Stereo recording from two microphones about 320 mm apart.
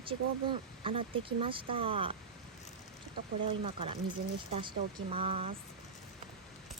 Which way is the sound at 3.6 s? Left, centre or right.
Centre.